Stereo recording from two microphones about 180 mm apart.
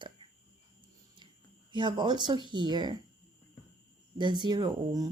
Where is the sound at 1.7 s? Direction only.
25° right (ahead or behind).